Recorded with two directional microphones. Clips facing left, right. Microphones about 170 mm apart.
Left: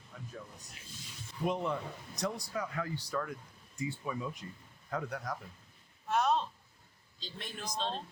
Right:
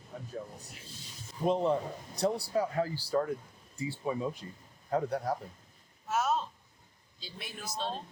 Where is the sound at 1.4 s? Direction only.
30° right (ahead or behind).